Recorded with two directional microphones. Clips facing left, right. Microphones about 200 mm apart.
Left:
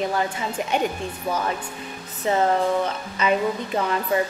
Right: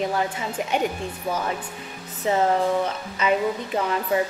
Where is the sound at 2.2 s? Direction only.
20° right (ahead or behind).